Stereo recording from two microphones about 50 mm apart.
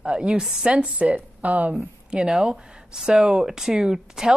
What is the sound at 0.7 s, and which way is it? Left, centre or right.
Speech, right.